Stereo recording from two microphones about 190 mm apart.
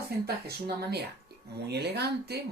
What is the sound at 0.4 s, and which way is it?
Speech, 60° right (ahead or behind).